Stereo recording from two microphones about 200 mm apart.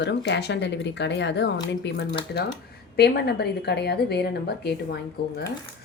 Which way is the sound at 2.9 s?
55° left (ahead or behind).